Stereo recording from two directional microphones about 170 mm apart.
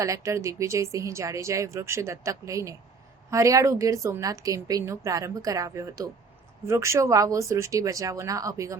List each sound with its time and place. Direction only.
0.0 s a woman's voice: 15° right (ahead or behind)